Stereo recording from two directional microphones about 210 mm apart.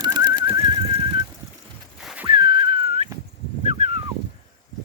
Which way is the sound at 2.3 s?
25° right (ahead or behind).